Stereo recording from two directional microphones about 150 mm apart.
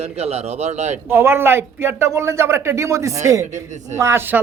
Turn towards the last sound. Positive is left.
turn(degrees=-15)  # may be behind; listen again after turning